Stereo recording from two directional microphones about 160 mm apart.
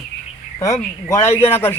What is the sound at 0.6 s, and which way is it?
Speech, 20° left (ahead or behind).